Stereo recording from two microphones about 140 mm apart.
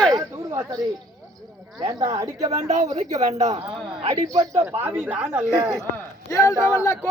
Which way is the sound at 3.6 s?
45° right (ahead or behind).